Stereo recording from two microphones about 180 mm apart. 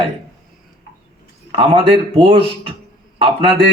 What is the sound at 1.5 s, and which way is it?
Speech, 30° right (ahead or behind).